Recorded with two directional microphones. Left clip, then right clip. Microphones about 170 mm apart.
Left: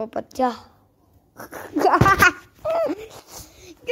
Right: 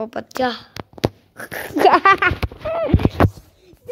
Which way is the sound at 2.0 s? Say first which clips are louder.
Right 2 dB; 25° right (ahead or behind).